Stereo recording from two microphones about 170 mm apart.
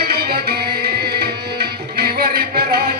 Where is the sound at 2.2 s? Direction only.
65° right (ahead or behind).